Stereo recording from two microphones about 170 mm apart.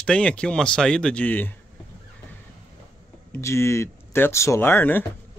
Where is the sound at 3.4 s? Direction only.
15° left (ahead or behind).